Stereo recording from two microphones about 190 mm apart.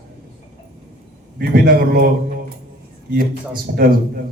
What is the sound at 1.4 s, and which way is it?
Speech, 50° right (ahead or behind).